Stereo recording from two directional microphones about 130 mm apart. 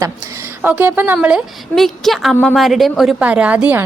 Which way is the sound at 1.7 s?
Centre (ahead or behind).